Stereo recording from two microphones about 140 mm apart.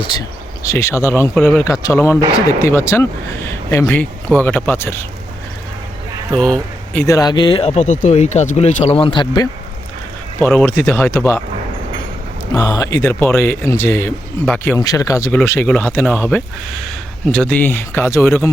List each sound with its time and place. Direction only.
0.0 s speech: 25° left (ahead or behind)
6.3 s speech: 5° left (ahead or behind)
7.0 s speech: 25° left (ahead or behind)
10.4 s speech: 10° left (ahead or behind)
12.5 s speech: 25° left (ahead or behind); by 14.8 s 10° left (ahead or behind)
14.8 s speech: 25° left (ahead or behind)